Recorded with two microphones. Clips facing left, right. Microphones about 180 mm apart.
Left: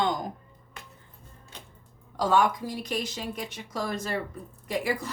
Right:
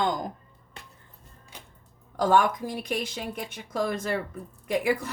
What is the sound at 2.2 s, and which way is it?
A woman's voice, 50° right (ahead or behind).